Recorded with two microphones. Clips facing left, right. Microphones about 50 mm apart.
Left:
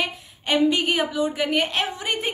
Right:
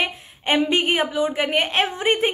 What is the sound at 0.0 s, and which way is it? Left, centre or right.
A woman's voice, right.